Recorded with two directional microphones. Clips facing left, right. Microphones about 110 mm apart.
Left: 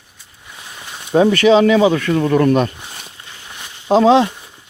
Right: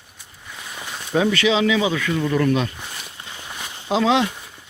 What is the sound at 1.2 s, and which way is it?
Speech, 40° left (ahead or behind).